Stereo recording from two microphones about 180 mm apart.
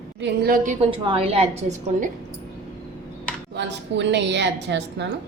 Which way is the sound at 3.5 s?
75° right (ahead or behind).